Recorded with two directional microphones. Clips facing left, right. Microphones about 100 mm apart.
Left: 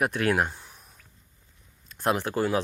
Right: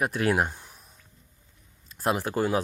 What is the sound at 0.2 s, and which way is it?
Speech, 20° right (ahead or behind).